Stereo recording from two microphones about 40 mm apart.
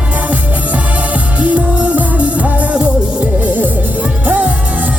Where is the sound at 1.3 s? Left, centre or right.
Right.